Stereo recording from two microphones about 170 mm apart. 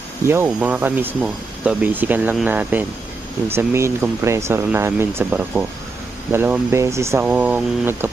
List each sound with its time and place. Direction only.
0.3 s speech: 10° right (ahead or behind)